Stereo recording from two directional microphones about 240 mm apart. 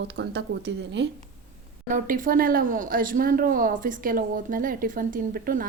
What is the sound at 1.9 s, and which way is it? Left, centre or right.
Speech, right.